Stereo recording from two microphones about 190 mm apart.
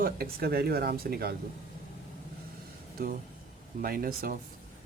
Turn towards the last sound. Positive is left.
turn(degrees=-50)  # may be behind; listen again after turning